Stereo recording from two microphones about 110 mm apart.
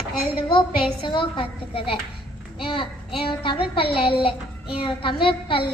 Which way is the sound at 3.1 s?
50° left (ahead or behind).